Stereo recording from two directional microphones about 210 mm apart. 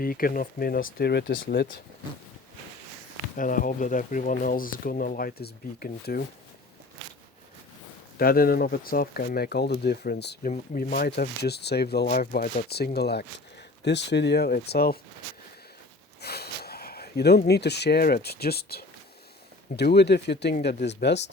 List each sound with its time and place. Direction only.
0.0 s speech: 45° left (ahead or behind)
3.3 s speech: 40° left (ahead or behind)
8.2 s speech: 45° left (ahead or behind)
16.2 s speech: 50° left (ahead or behind)